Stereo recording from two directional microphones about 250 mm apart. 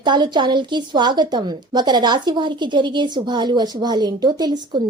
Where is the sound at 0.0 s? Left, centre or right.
Centre.